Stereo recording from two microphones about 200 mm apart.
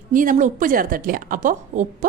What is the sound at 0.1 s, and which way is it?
A woman's voice, 40° right (ahead or behind).